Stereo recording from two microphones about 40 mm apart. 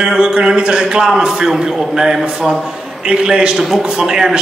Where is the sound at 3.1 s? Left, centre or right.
Right.